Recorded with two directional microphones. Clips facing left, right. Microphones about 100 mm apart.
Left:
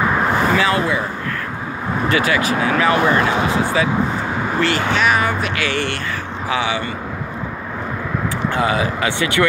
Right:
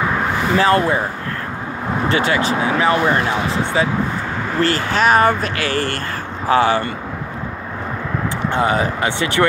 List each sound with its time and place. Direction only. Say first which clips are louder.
0.6 s speech: right 3 dB; 40° right (ahead or behind)
2.0 s speech: even; 30° right (ahead or behind)
8.5 s speech: right 2 dB; 25° right (ahead or behind)